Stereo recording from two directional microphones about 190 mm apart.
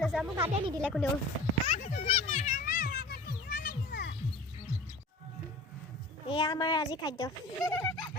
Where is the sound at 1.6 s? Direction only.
35° left (ahead or behind); by 4.1 s 55° left (ahead or behind).